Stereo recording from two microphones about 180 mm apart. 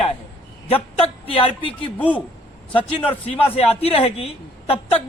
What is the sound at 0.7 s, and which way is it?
Speech, 30° left (ahead or behind).